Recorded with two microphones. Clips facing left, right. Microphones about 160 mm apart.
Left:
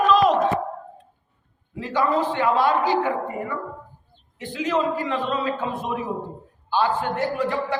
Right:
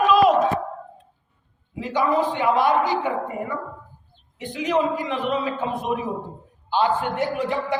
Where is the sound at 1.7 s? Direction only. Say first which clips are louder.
Right 1 dB; 15° right (ahead or behind).